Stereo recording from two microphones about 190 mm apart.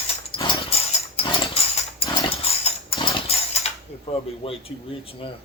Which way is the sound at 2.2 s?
30° left (ahead or behind).